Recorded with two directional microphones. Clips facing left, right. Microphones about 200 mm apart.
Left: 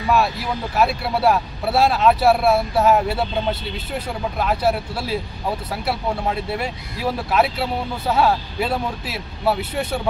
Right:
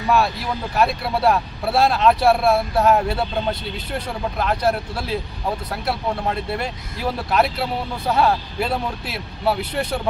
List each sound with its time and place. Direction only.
0.7 s speech: 5° left (ahead or behind)